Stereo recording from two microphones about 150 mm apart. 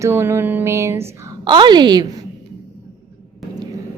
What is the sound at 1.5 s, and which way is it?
Speech, 30° right (ahead or behind).